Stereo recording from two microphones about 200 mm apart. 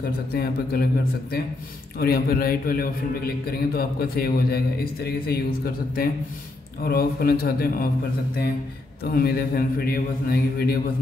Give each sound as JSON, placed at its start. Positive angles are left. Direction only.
{"t": 0.3, "sound": "a man's voice", "side_deg": 50}
{"t": 2.0, "sound": "a man's voice", "side_deg": 50}
{"t": 9.1, "sound": "a man's voice", "side_deg": 50}